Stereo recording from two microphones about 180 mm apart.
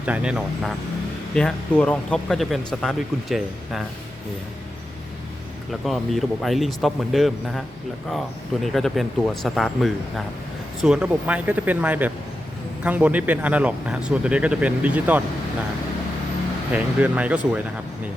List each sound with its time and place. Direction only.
0.0 s speech: 5° right (ahead or behind)
5.8 s speech: centre (ahead or behind)
8.6 s speech: centre (ahead or behind)
16.7 s speech: 5° right (ahead or behind)